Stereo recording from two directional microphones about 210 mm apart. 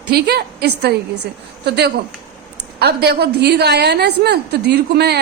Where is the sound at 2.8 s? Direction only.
50° right (ahead or behind).